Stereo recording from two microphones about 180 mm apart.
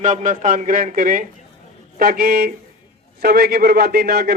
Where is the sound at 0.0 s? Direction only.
40° right (ahead or behind).